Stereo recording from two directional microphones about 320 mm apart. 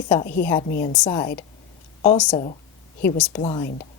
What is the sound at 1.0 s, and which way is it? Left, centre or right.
Speech, centre.